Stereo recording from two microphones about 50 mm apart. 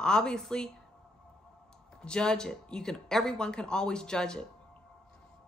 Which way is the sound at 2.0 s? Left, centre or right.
Centre.